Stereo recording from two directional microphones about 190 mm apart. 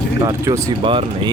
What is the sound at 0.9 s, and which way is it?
Speech, 25° right (ahead or behind).